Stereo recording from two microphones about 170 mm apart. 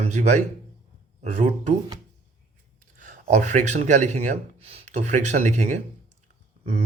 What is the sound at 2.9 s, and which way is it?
Speech, 50° right (ahead or behind).